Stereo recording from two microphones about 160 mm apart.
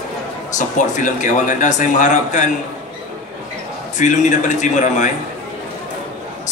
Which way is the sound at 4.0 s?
50° left (ahead or behind).